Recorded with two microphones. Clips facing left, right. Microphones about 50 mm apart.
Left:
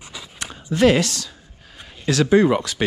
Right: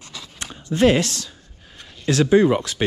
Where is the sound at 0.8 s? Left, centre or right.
Left.